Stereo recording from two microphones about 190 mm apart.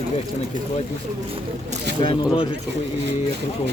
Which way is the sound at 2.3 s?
25° left (ahead or behind).